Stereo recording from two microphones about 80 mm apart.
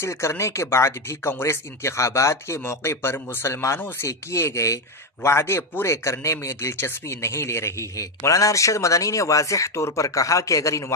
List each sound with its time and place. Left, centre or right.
0.0 s a man's voice: left